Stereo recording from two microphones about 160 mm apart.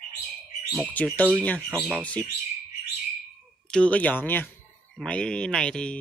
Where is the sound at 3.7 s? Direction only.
5° left (ahead or behind).